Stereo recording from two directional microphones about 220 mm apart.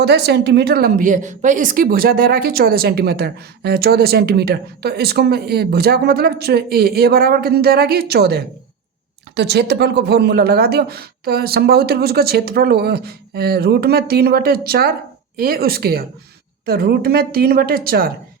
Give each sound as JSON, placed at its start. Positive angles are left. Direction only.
{"t": 0.0, "sound": "a woman's voice", "side_deg": -50}